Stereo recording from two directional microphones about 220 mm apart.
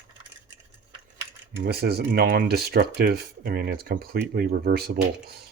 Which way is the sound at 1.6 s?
45° right (ahead or behind).